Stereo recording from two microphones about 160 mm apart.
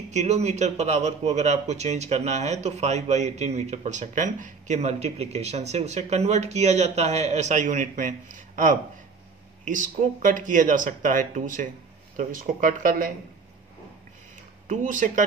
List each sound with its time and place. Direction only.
0.1 s a man's voice: 45° right (ahead or behind); by 13.1 s 60° right (ahead or behind)
14.7 s a man's voice: 50° right (ahead or behind)